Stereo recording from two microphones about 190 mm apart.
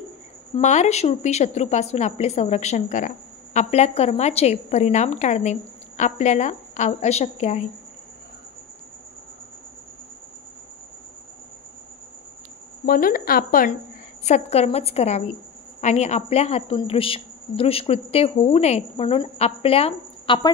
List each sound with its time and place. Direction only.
0.6 s a woman's voice: 40° left (ahead or behind)
12.8 s a woman's voice: 50° left (ahead or behind)
14.2 s a woman's voice: 35° left (ahead or behind)